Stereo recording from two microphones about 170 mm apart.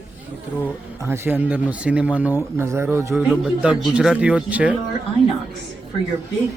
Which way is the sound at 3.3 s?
5° right (ahead or behind).